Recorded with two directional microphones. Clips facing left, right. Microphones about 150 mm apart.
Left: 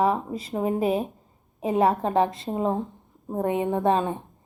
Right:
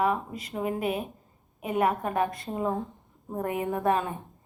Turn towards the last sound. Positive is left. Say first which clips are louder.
# left 4 dB
turn(degrees=25)  # may be behind; listen again after turning